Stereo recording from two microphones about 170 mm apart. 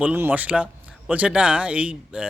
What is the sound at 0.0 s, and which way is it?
Speech, 10° right (ahead or behind).